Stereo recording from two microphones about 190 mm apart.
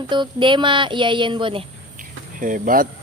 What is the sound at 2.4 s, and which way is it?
Speech, 45° right (ahead or behind).